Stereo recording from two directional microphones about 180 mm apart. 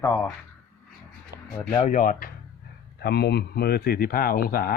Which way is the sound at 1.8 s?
45° left (ahead or behind).